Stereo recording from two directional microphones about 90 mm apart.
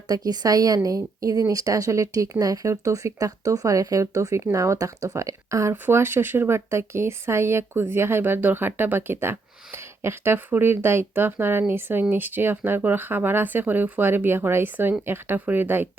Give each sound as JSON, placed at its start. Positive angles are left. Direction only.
{"t": 0.1, "sound": "a woman's voice", "side_deg": -45}
{"t": 5.7, "sound": "speech", "side_deg": -25}